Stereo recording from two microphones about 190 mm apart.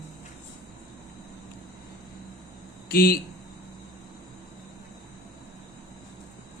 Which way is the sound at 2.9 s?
50° left (ahead or behind).